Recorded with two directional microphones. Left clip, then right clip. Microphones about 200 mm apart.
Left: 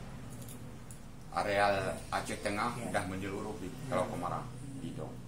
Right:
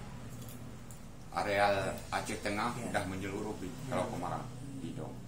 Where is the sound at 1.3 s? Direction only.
15° left (ahead or behind).